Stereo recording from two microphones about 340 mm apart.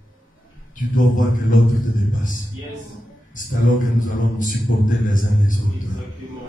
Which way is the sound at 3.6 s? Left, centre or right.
Left.